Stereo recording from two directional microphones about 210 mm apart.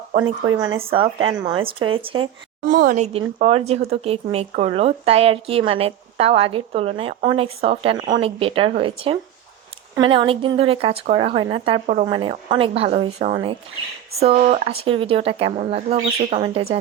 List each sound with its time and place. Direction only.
0.2 s a woman's voice: 20° right (ahead or behind)
2.6 s a woman's voice: 40° right (ahead or behind)